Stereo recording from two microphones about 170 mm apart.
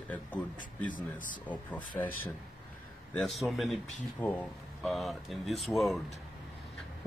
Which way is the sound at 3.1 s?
Centre (ahead or behind).